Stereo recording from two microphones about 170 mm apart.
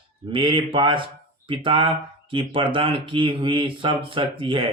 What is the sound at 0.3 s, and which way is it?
Speech, 30° right (ahead or behind).